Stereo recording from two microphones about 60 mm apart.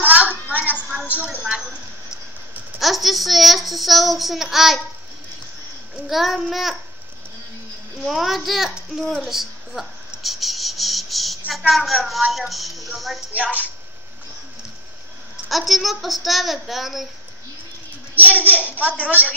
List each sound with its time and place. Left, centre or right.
0.0 s a sound: right
2.8 s a child's voice: centre
6.0 s a child's voice: centre
8.0 s a child's voice: centre
9.2 s cricket: centre
11.5 s a child's voice: centre
13.4 s a woman's voice: right
15.4 s a child's voice: centre
18.1 s a woman's voice: right